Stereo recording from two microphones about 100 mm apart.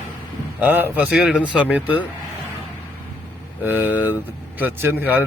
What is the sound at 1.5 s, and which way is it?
Speech, 15° right (ahead or behind).